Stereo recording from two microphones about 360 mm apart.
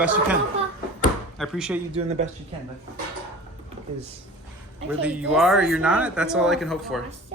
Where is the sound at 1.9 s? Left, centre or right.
Centre.